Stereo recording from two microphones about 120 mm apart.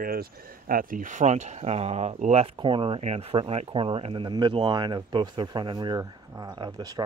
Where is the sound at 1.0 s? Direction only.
85° right.